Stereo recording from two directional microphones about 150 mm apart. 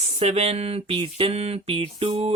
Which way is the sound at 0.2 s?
45° right (ahead or behind).